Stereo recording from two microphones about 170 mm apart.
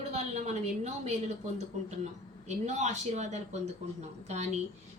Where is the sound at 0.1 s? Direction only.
40° right (ahead or behind).